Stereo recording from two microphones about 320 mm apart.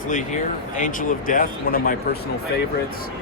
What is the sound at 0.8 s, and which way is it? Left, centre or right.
Speech, left.